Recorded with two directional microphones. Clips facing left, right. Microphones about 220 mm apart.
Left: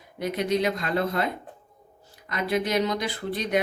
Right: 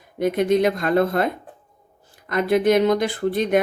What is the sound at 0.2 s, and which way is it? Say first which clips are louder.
Speech: right 7 dB; 50° right (ahead or behind).